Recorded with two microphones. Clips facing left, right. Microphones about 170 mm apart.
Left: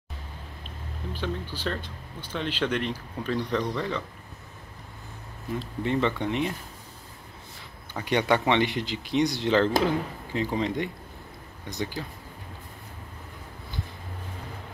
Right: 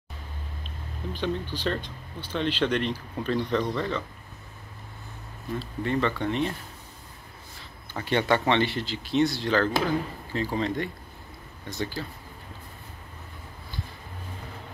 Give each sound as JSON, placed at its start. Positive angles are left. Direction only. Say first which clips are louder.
{"t": 1.1, "sound": "speech", "louder": "right 3 dB", "side_deg": 10}
{"t": 5.6, "sound": "speech", "louder": "left 1 dB", "side_deg": 20}
{"t": 7.9, "sound": "speech", "louder": "even", "side_deg": 15}